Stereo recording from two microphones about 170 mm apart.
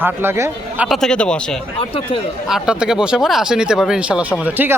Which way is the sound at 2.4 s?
5° right (ahead or behind).